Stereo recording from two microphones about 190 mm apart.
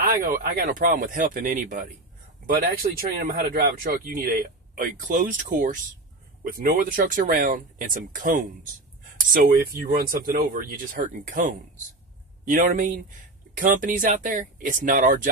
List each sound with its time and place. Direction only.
0.0 s speech: 50° right (ahead or behind)